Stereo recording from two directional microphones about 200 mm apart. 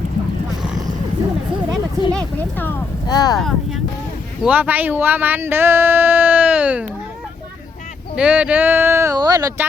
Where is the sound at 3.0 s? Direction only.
20° left (ahead or behind).